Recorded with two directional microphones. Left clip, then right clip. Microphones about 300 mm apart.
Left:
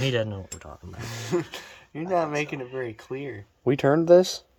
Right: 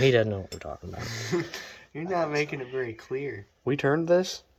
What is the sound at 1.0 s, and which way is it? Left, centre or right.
Speech, left.